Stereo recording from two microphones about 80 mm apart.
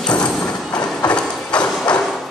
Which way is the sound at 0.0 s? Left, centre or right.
Centre.